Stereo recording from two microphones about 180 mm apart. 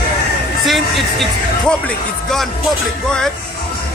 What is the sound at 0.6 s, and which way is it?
Speech, centre (ahead or behind).